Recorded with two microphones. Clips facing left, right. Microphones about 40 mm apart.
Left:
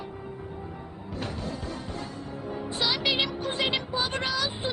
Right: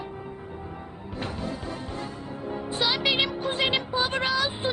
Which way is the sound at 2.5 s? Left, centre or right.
Centre.